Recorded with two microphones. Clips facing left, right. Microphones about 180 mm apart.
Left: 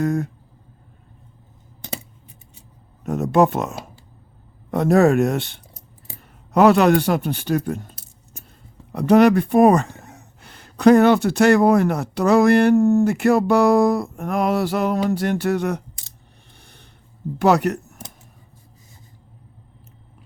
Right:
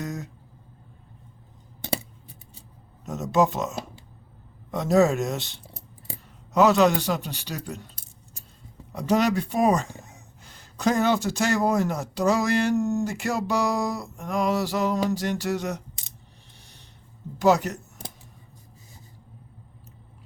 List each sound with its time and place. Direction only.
0.0 s speech: 55° left (ahead or behind)
1.9 s scissors: 35° right (ahead or behind)
3.0 s speech: 60° left (ahead or behind)
16.6 s a sound: 55° left (ahead or behind)
17.3 s speech: 60° left (ahead or behind)